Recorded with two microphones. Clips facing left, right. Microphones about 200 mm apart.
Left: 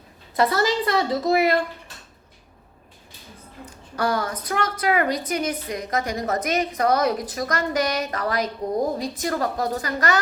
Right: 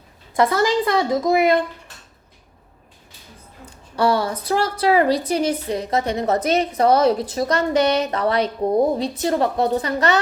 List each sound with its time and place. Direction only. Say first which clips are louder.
0.3 s a woman's voice: right 3 dB; 20° right (ahead or behind)
3.9 s a woman's voice: right 5 dB; 30° right (ahead or behind)